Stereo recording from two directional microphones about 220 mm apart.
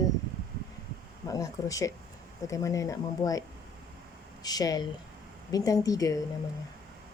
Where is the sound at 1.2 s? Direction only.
15° left (ahead or behind).